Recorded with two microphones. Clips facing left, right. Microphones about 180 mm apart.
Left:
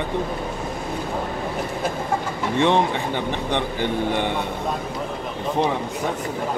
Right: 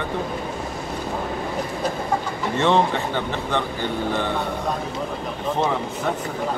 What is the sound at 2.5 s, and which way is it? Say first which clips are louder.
A man's voice: even; 15° left (ahead or behind).